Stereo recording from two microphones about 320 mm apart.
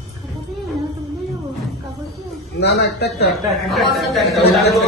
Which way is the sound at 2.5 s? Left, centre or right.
Left.